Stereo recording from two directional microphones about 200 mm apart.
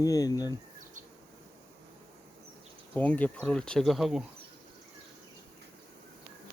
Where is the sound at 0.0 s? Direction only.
20° left (ahead or behind).